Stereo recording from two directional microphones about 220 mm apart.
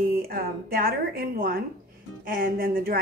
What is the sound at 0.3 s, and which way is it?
A woman's voice, 40° right (ahead or behind).